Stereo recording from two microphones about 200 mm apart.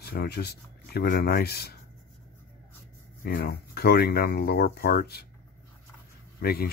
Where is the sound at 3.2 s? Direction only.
50° left (ahead or behind).